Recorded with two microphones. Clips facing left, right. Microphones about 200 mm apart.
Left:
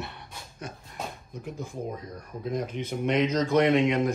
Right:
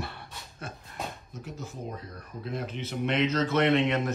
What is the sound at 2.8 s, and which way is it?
Speech, 50° left (ahead or behind).